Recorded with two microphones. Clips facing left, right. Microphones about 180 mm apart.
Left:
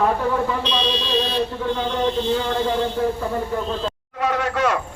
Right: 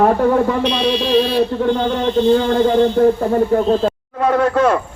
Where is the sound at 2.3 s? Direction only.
50° right (ahead or behind).